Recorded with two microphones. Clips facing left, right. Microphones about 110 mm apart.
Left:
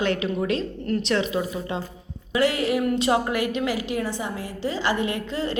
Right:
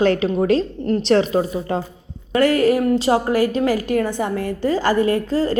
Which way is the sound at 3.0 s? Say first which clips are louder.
Right 5 dB; 30° right (ahead or behind).